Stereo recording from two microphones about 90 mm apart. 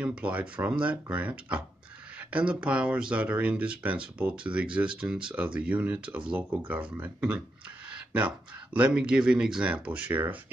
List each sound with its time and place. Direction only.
0.0 s speech: 15° right (ahead or behind)